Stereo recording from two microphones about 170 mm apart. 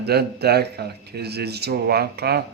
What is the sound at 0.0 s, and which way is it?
Speech, 70° right (ahead or behind).